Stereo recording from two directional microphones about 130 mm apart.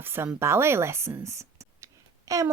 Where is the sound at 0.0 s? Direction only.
15° right (ahead or behind).